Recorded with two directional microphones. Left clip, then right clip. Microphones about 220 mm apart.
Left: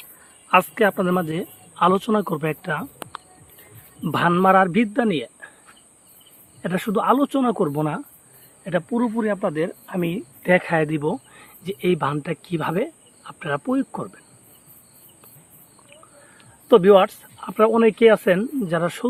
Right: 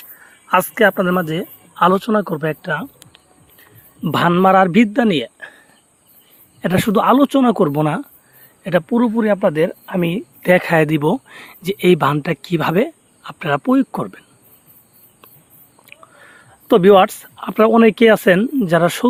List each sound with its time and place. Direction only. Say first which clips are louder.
0.4 s speech: right 4 dB; 20° right (ahead or behind)
4.0 s a man's voice: right 4 dB; 35° right (ahead or behind)
6.6 s a man's voice: right 7 dB; 40° right (ahead or behind)
15.9 s speech: right 7 dB; 45° right (ahead or behind)